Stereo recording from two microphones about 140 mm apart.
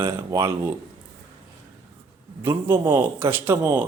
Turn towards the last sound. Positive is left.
turn(degrees=-20)  # may be behind; listen again after turning